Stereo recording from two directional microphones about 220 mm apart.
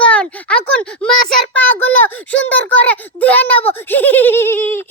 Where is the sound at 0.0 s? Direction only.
5° left (ahead or behind).